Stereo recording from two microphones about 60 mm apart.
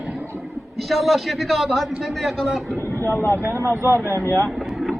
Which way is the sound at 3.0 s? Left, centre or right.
Left.